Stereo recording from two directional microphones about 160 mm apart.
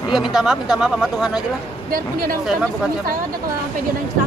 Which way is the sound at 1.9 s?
65° right (ahead or behind).